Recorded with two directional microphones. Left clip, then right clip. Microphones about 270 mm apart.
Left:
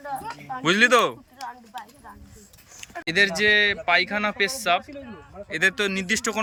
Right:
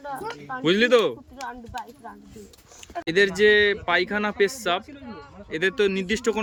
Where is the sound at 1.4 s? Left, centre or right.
Right.